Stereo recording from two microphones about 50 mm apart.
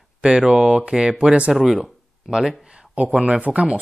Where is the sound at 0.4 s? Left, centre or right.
Centre.